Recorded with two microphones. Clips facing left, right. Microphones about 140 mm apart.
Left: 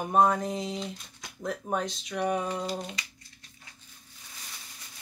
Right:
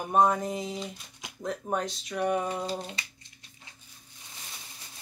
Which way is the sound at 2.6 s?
30° right (ahead or behind).